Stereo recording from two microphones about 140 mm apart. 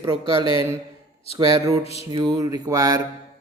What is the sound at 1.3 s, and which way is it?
Speech, 25° right (ahead or behind).